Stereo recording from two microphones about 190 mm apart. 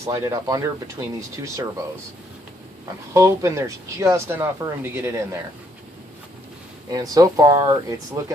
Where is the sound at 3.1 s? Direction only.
15° right (ahead or behind).